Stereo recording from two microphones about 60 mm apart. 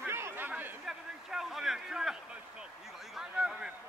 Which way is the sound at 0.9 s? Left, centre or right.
Centre.